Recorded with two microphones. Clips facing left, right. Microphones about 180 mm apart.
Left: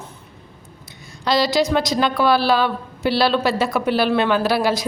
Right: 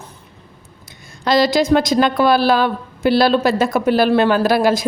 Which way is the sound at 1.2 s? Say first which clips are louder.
Right 3 dB; 50° right (ahead or behind).